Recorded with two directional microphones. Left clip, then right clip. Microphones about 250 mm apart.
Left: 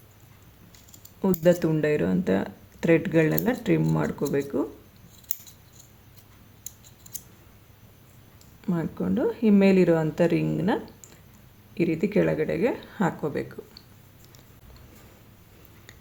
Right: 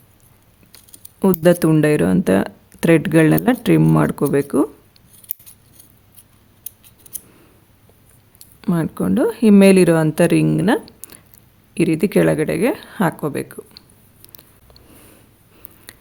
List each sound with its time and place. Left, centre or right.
1.2 s speech: right
8.4 s speech: right
15.9 s a sound: right